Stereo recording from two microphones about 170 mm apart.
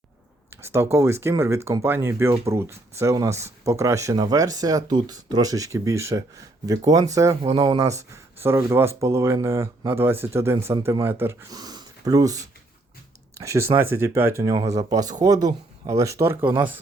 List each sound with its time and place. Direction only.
0.5 s speech: 15° right (ahead or behind)